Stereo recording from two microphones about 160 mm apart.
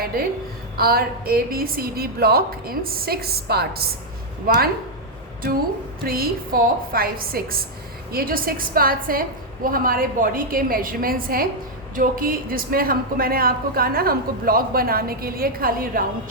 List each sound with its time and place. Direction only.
0.8 s speech: 70° right (ahead or behind)
4.5 s speech: 70° right (ahead or behind)
6.1 s a woman's voice: 65° right (ahead or behind)